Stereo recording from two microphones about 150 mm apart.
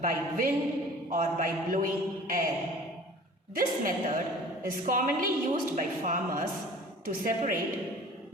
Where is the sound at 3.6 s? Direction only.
65° right (ahead or behind).